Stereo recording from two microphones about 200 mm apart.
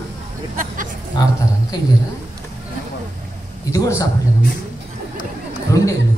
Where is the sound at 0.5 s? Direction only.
40° right (ahead or behind).